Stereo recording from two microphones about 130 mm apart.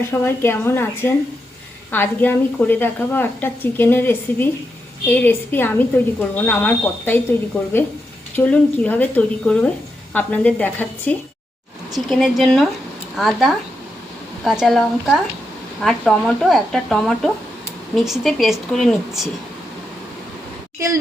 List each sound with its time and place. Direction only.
0.0 s a woman's voice: 20° left (ahead or behind)
8.4 s a woman's voice: 15° left (ahead or behind)
11.9 s speech: centre (ahead or behind)